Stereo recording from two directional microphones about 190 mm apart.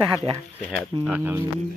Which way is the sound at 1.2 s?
10° right (ahead or behind).